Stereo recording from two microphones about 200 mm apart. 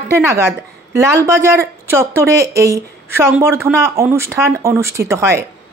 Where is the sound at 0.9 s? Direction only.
15° right (ahead or behind).